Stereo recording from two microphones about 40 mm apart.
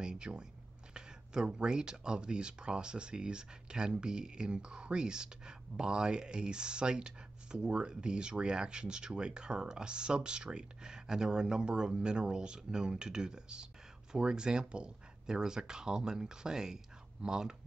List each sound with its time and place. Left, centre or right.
0.0 s speech: right